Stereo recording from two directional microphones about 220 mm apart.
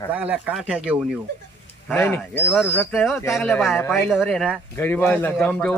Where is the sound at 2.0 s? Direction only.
10° left (ahead or behind).